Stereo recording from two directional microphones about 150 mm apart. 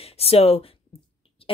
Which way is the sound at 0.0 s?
40° left (ahead or behind).